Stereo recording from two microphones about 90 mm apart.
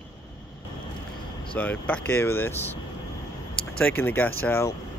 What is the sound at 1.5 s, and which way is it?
Speech, 15° left (ahead or behind).